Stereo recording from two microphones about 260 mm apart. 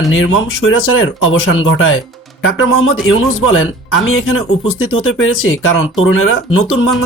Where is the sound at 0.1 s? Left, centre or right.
Left.